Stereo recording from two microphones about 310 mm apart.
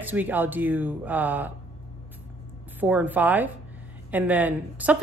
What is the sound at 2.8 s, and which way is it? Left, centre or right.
A woman's voice, centre.